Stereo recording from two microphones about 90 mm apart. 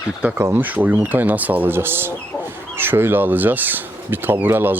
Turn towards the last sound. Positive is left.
turn(degrees=-20)  # may be behind; listen again after turning